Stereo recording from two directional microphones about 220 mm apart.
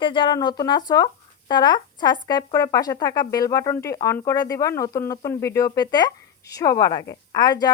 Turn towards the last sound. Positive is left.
turn(degrees=20)  # may be behind; listen again after turning